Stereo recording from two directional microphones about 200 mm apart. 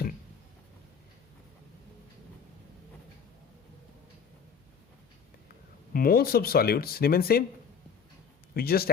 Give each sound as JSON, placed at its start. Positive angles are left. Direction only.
{"t": 5.9, "sound": "speech", "side_deg": 45}
{"t": 8.5, "sound": "speech", "side_deg": 50}